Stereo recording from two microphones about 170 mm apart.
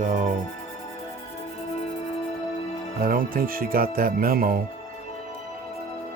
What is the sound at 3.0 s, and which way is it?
Speech, 55° right (ahead or behind).